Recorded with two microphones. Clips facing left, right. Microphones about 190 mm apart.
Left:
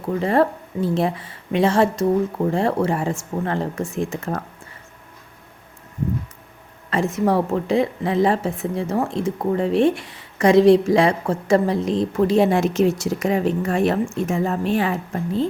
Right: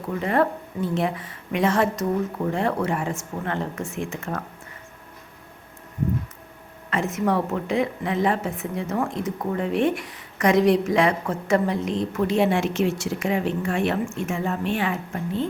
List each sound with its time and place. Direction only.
0.2 s a woman's voice: 30° left (ahead or behind)
6.9 s a woman's voice: 30° left (ahead or behind)